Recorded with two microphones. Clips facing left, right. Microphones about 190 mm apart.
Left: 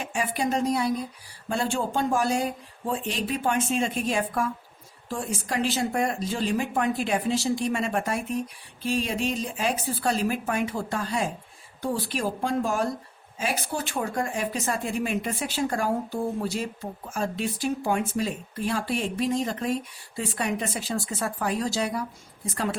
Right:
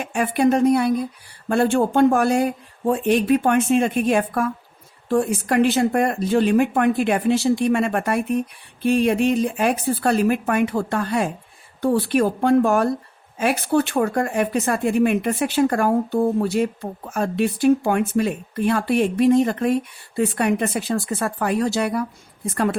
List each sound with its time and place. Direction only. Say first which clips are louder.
0.0 s speech: right 9 dB; 60° right (ahead or behind)